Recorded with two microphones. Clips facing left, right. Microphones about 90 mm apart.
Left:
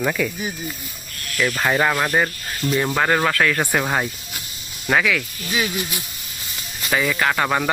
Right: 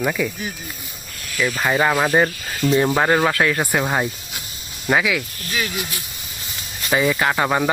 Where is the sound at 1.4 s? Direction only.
5° right (ahead or behind); by 3.6 s 20° right (ahead or behind).